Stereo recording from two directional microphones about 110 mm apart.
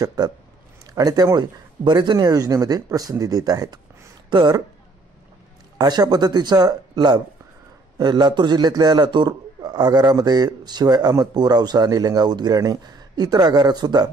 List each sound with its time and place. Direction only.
0.0 s a man's voice: 40° right (ahead or behind)
5.8 s a man's voice: 40° right (ahead or behind)